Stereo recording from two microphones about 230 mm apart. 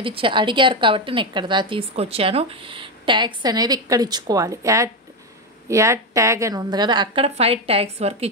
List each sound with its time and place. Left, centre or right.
0.0 s a woman's voice: right